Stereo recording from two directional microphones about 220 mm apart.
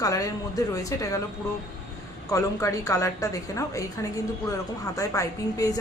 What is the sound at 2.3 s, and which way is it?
A woman's voice, 15° left (ahead or behind).